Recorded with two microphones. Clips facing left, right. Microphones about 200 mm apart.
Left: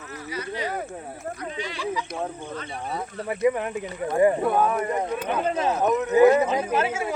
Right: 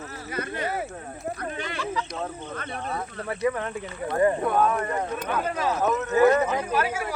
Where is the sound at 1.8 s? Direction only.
15° left (ahead or behind).